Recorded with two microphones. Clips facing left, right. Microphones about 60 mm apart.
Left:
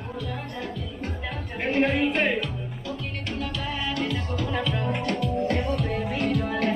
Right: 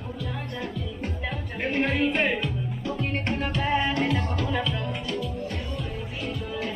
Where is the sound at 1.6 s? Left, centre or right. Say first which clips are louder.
Left 2 dB; centre.